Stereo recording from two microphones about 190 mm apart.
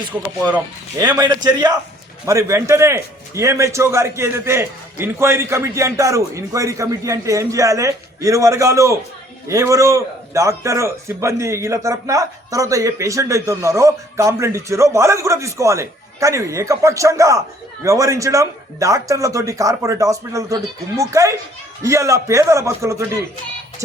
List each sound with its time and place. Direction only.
0.1 s a man's voice: 10° right (ahead or behind)
1.1 s a man's voice: 20° right (ahead or behind)